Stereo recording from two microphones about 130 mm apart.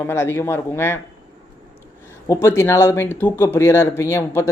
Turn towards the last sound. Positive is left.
turn(degrees=20)  # may be behind; listen again after turning